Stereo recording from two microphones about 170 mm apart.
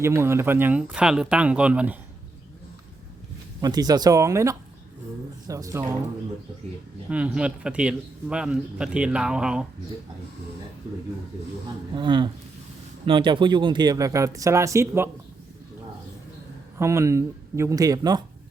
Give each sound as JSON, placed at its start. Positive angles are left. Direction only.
{"t": 0.0, "sound": "speech", "side_deg": -15}
{"t": 3.6, "sound": "speech", "side_deg": -25}
{"t": 7.1, "sound": "a man's voice", "side_deg": -5}
{"t": 11.9, "sound": "speech", "side_deg": -25}
{"t": 16.7, "sound": "speech", "side_deg": -15}